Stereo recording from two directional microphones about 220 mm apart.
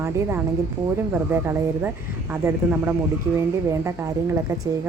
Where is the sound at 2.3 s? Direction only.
10° right (ahead or behind).